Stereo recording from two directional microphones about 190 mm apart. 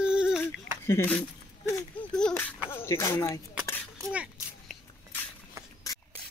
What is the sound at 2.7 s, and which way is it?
Speech, 15° left (ahead or behind).